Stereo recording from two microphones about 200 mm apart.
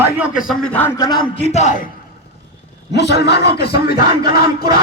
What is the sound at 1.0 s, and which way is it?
Speech, 20° left (ahead or behind).